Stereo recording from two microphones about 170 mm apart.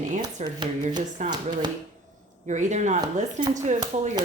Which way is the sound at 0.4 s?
45° right (ahead or behind).